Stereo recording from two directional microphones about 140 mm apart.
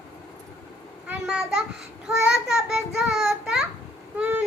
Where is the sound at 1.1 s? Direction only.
5° right (ahead or behind).